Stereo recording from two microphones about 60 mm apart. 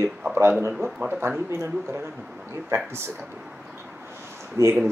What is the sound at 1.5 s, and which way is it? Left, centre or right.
Speech, right.